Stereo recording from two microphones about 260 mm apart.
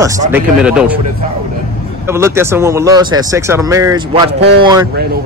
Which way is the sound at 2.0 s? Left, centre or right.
Centre.